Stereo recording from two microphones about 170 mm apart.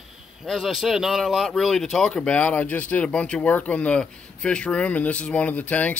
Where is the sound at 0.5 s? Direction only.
Centre (ahead or behind).